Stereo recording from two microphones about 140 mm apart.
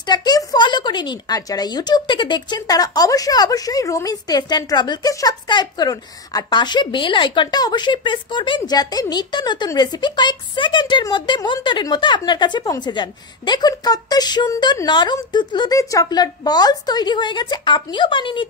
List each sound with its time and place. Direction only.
0.0 s speech: 30° left (ahead or behind)